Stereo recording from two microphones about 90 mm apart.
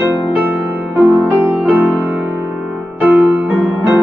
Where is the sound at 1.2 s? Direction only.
20° right (ahead or behind).